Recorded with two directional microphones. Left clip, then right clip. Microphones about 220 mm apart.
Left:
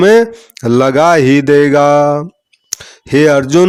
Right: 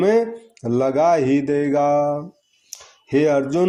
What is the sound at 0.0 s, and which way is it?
Speech, 40° left (ahead or behind).